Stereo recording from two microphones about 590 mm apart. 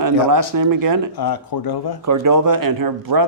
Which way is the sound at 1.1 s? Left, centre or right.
Left.